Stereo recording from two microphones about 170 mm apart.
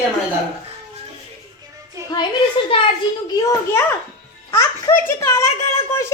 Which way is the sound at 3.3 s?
20° left (ahead or behind).